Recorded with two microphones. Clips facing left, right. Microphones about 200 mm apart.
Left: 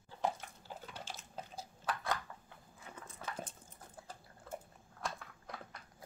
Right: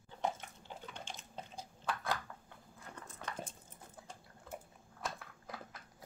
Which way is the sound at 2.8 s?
5° left (ahead or behind).